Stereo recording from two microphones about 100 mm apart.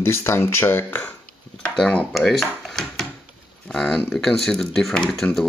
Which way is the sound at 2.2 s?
5° left (ahead or behind).